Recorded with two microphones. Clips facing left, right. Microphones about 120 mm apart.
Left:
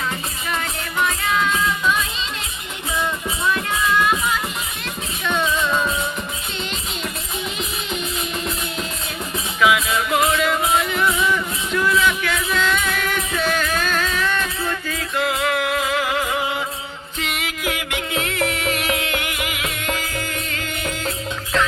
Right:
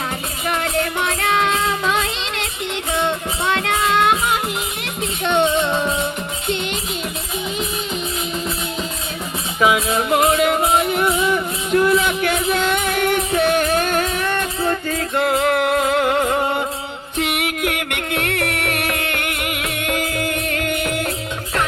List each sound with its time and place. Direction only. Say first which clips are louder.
0.4 s music: right 8 dB; 65° right (ahead or behind)
9.6 s music: right 1 dB; 40° right (ahead or behind)
14.7 s music: right 5 dB; 40° right (ahead or behind); by 21.1 s 60° right (ahead or behind)